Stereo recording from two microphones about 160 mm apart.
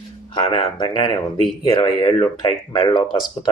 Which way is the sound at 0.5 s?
30° left (ahead or behind).